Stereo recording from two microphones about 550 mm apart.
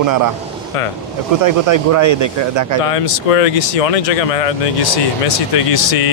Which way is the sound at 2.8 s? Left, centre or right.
Left.